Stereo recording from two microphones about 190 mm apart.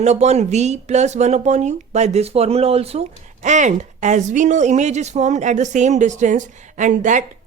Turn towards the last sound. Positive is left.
turn(degrees=-40)  # may be behind; listen again after turning